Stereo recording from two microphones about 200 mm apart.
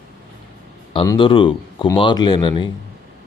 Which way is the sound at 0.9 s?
20° left (ahead or behind).